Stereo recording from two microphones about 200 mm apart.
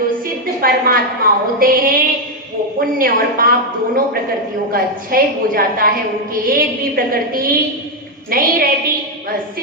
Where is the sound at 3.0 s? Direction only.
45° right (ahead or behind).